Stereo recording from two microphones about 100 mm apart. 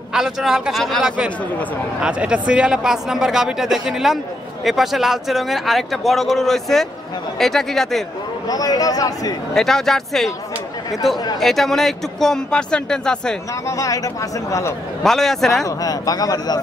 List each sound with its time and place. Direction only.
0.1 s speech: 5° right (ahead or behind)
2.0 s speech: 10° right (ahead or behind)
8.5 s speech: 40° left (ahead or behind)
9.5 s speech: 5° left (ahead or behind)
11.3 s speech: centre (ahead or behind)
13.7 s speech: 35° left (ahead or behind)
15.0 s speech: 5° left (ahead or behind)
15.6 s speech: 40° left (ahead or behind)